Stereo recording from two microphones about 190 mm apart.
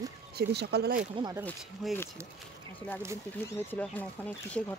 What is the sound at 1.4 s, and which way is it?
Speech, 10° left (ahead or behind).